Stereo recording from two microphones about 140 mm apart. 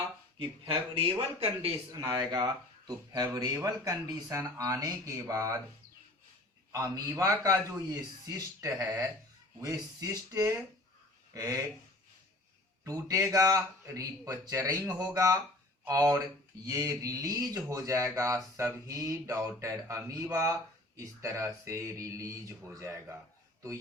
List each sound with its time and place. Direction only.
0.7 s speech: 40° right (ahead or behind)
1.9 s speech: 25° right (ahead or behind)
6.7 s speech: 25° right (ahead or behind)
12.8 s speech: 25° right (ahead or behind)